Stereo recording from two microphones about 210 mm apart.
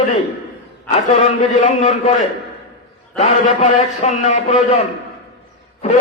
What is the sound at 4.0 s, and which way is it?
Speech, 30° left (ahead or behind).